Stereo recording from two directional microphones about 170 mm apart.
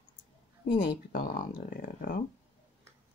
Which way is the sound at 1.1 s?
55° left (ahead or behind).